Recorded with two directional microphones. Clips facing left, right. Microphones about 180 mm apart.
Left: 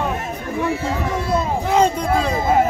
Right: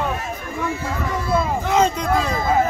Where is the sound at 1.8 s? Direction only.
10° left (ahead or behind).